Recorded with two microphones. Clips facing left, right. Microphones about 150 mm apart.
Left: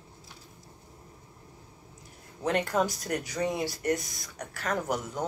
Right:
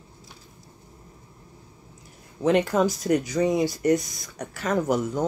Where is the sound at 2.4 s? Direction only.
Centre (ahead or behind).